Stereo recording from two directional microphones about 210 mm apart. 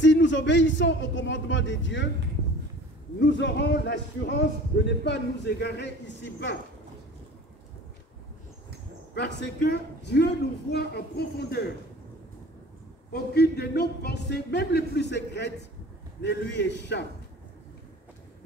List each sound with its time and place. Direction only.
0.0 s a man's voice: 60° left (ahead or behind)
3.2 s a man's voice: 55° left (ahead or behind)
9.1 s speech: 50° left (ahead or behind)
13.1 s a man's voice: 50° left (ahead or behind)